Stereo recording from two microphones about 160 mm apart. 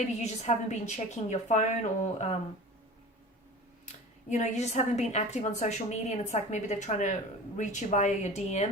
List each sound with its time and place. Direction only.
0.0 s a woman's voice: 45° left (ahead or behind)
3.8 s a woman's voice: 50° left (ahead or behind)